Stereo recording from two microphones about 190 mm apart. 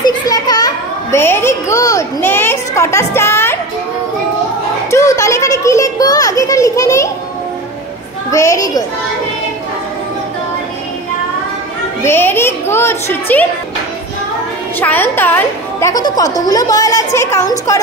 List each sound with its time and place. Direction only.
0.0 s children playing: 20° left (ahead or behind)
4.9 s a sound: 15° left (ahead or behind)
8.3 s a woman's voice: 15° left (ahead or behind)
12.0 s a woman's voice: 10° left (ahead or behind)
14.8 s a woman's voice: 10° left (ahead or behind)